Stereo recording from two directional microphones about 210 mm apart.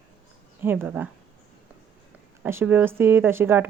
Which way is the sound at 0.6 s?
10° right (ahead or behind).